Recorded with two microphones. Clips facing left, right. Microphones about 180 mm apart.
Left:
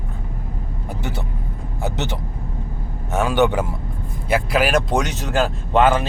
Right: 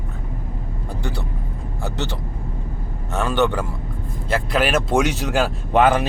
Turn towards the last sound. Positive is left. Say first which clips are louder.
# even
turn(degrees=-15)  # may be behind; listen again after turning